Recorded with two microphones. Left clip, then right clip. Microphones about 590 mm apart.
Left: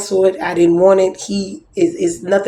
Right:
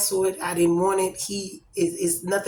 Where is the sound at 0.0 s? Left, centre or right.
Right.